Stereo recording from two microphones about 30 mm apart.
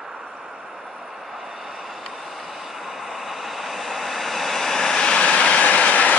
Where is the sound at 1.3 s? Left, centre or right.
Centre; by 5.1 s left.